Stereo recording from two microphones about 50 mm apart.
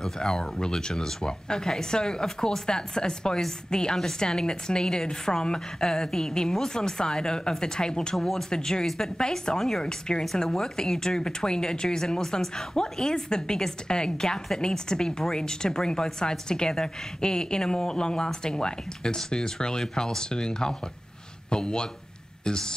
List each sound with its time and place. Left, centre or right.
0.0 s speech: centre